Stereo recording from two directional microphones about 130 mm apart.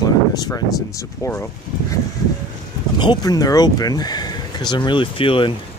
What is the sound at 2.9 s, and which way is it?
Speech, 35° left (ahead or behind).